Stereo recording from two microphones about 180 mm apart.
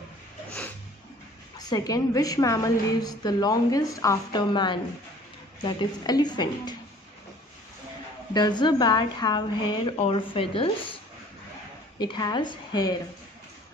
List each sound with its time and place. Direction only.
1.6 s a woman's voice: 20° left (ahead or behind)
8.3 s a woman's voice: 25° left (ahead or behind)
12.0 s a woman's voice: 25° left (ahead or behind)